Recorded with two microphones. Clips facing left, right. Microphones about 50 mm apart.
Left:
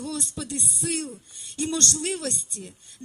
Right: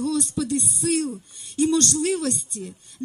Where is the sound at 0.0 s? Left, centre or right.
Left.